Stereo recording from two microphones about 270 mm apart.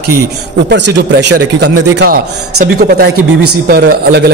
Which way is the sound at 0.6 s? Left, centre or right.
Right.